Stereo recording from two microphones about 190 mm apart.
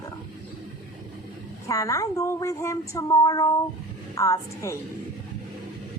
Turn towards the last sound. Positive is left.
turn(degrees=15)  # may be behind; listen again after turning